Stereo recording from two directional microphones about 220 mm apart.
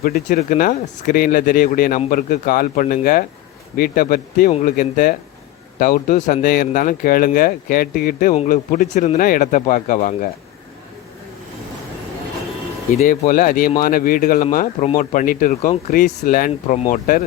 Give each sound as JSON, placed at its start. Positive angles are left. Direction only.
{"t": 0.0, "sound": "speech", "side_deg": 40}
{"t": 13.0, "sound": "speech", "side_deg": 35}